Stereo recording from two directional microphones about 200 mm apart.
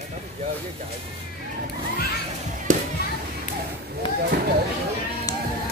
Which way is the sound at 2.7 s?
40° right (ahead or behind).